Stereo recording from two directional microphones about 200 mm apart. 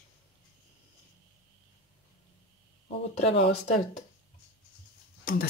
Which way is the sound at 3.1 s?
30° left (ahead or behind).